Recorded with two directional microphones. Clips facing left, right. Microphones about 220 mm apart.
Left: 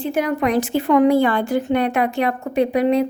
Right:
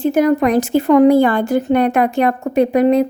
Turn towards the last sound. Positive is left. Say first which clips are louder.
# right 4 dB
turn(degrees=-45)  # may be behind; listen again after turning